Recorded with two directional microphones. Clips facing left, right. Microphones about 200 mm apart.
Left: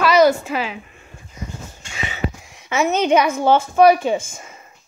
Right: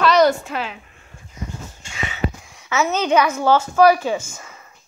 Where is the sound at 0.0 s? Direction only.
5° left (ahead or behind).